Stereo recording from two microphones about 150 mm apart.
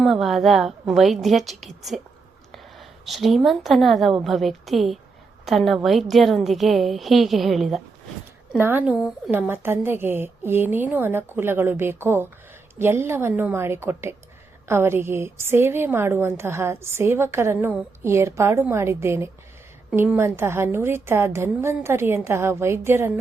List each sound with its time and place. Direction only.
0.0 s a woman's voice: centre (ahead or behind)
8.5 s a woman's voice: 15° right (ahead or behind)